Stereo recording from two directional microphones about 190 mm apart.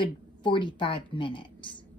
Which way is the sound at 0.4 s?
25° left (ahead or behind).